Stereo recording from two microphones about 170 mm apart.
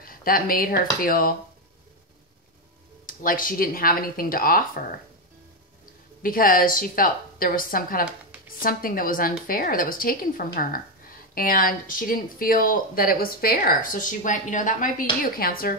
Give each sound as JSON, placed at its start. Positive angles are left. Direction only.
{"t": 0.0, "sound": "a woman's voice", "side_deg": 60}
{"t": 3.1, "sound": "a woman's voice", "side_deg": 55}
{"t": 6.2, "sound": "a woman's voice", "side_deg": 55}